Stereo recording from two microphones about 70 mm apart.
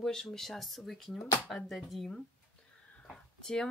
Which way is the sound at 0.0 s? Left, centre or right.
Centre.